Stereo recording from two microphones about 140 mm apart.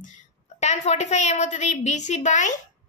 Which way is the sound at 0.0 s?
55° left (ahead or behind).